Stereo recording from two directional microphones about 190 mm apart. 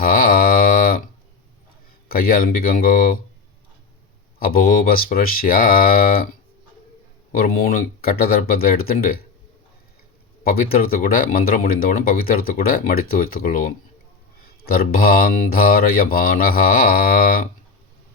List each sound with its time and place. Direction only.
0.0 s a sound: 50° left (ahead or behind)
2.0 s speech: 50° left (ahead or behind)
4.4 s speech: 50° left (ahead or behind)
7.3 s speech: 50° left (ahead or behind)
10.4 s speech: 50° left (ahead or behind)